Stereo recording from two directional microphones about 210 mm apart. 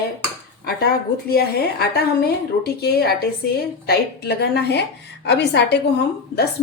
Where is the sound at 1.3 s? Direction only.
50° left (ahead or behind).